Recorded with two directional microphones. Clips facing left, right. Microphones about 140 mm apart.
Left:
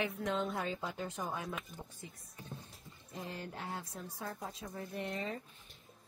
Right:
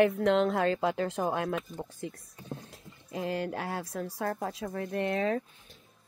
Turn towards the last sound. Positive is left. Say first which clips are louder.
# right 11 dB
turn(degrees=-90)